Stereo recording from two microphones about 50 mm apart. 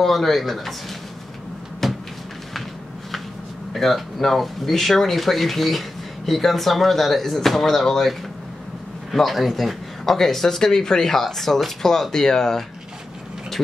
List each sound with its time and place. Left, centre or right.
0.0 s speech: centre
1.8 s a sound: centre
3.7 s a man's voice: centre